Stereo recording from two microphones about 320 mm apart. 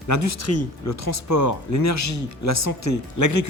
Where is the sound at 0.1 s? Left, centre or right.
Left.